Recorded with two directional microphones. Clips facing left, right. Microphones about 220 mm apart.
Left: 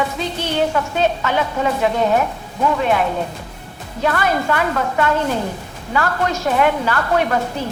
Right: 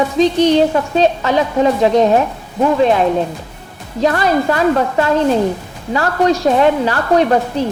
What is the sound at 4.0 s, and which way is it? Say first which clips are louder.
A woman's voice: right 5 dB; 35° right (ahead or behind).